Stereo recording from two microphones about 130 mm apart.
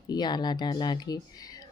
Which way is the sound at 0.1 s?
35° left (ahead or behind).